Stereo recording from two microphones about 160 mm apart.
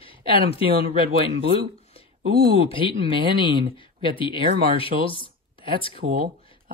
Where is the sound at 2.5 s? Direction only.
35° left (ahead or behind).